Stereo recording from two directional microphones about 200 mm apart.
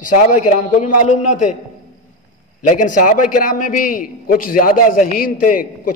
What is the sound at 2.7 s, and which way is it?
A man's voice, 40° left (ahead or behind).